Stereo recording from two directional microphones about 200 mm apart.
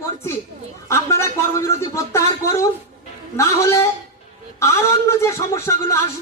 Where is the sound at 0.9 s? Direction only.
15° left (ahead or behind).